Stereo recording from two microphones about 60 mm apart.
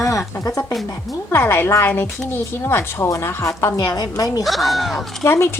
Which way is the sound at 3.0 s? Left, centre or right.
Left.